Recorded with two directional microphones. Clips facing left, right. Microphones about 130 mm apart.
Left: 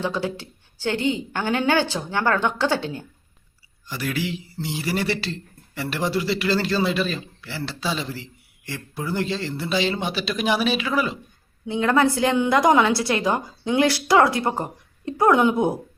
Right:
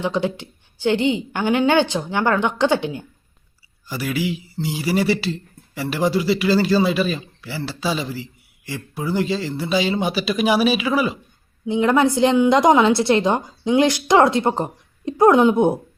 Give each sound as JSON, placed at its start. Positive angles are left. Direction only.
{"t": 0.0, "sound": "a woman's voice", "side_deg": -20}